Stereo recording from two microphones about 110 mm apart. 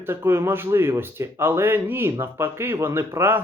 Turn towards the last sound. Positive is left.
turn(degrees=-20)  # may be behind; listen again after turning